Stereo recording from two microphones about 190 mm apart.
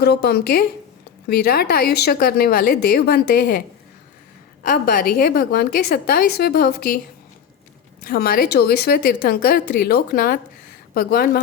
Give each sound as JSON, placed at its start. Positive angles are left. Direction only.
{"t": 0.0, "sound": "speech", "side_deg": 55}
{"t": 4.6, "sound": "a woman's voice", "side_deg": 50}
{"t": 8.0, "sound": "a woman's voice", "side_deg": 50}